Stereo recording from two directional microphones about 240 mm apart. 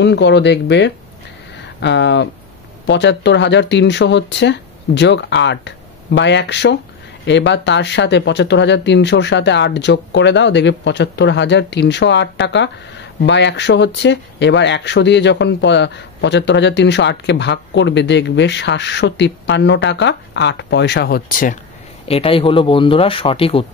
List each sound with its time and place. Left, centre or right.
0.0 s speech: left
22.0 s speech: left